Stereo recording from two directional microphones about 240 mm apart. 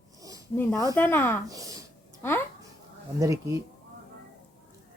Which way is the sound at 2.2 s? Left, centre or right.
Centre.